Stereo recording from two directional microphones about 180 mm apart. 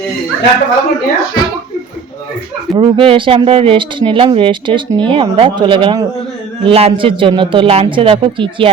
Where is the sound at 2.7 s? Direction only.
30° right (ahead or behind).